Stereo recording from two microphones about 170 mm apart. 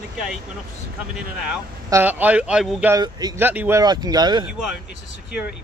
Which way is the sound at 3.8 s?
25° right (ahead or behind).